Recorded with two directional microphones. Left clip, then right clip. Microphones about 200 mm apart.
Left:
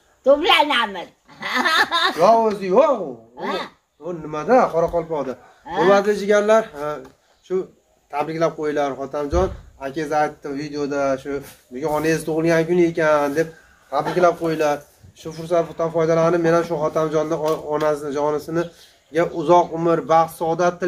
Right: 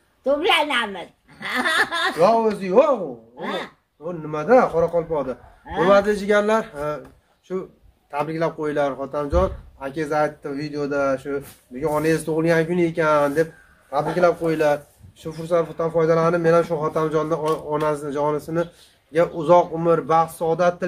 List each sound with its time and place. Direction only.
0.2 s a man's voice: 5° right (ahead or behind)